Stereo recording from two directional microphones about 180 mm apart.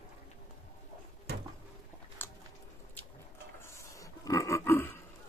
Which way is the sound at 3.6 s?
15° left (ahead or behind).